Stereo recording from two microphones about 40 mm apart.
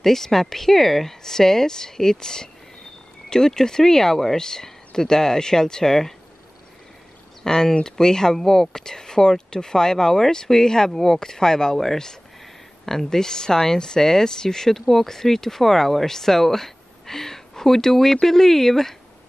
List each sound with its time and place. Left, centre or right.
0.0 s speech: centre
7.4 s speech: centre